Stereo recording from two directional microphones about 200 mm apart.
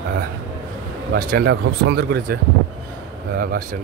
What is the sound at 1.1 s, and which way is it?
Speech, 55° right (ahead or behind).